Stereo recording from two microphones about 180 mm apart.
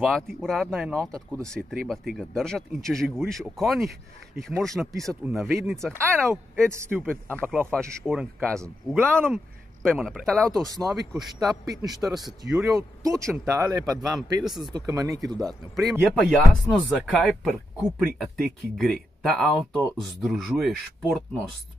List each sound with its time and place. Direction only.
0.0 s speech: centre (ahead or behind)
6.6 s a man's voice: 15° right (ahead or behind)
8.5 s a man's voice: 15° right (ahead or behind)
9.8 s speech: centre (ahead or behind)
11.3 s speech: 20° right (ahead or behind)
12.3 s speech: 5° right (ahead or behind)
12.6 s a man's voice: 20° right (ahead or behind)
15.7 s speech: centre (ahead or behind)